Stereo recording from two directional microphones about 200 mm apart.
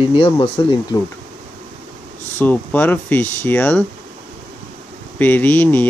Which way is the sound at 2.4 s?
10° left (ahead or behind).